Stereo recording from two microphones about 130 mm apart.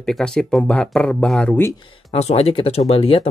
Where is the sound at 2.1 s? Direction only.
55° left (ahead or behind).